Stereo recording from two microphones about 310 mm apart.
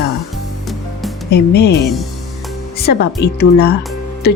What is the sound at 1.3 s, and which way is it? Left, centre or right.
Speech, left.